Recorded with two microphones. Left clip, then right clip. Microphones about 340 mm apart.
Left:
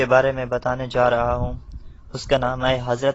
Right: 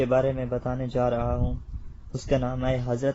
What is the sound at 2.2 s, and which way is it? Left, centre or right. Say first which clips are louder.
Speech: left 7 dB; left.